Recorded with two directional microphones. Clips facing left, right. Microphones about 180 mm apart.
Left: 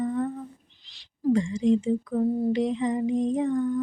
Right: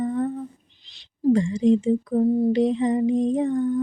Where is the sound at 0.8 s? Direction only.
20° right (ahead or behind).